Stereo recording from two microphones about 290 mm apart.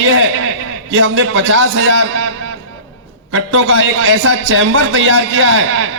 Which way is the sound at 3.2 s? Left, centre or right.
Right.